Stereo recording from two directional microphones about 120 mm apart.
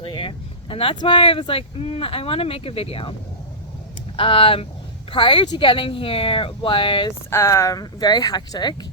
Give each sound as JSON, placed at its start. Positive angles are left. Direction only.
{"t": 0.0, "sound": "speech", "side_deg": 45}
{"t": 4.2, "sound": "speech", "side_deg": 50}
{"t": 7.3, "sound": "speech", "side_deg": 20}